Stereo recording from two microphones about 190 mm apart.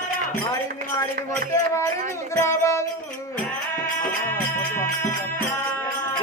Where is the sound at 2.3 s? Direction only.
15° left (ahead or behind).